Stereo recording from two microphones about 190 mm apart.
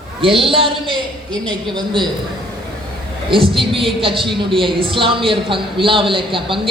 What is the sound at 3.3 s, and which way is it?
Speech, 30° right (ahead or behind).